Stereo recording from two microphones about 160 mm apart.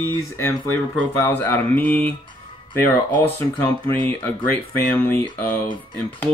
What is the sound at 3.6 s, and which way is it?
Speech, 10° left (ahead or behind).